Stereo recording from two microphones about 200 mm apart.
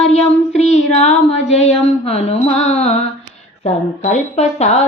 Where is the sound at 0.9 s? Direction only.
35° left (ahead or behind).